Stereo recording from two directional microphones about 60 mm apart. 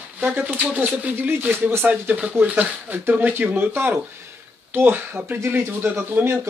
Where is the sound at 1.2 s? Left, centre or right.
Right.